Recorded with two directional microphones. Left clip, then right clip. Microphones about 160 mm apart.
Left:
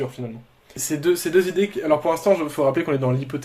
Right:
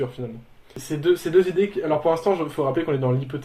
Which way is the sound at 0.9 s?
50° left (ahead or behind).